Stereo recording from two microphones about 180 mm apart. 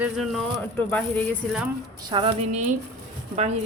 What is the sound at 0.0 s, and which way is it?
Speech, centre (ahead or behind).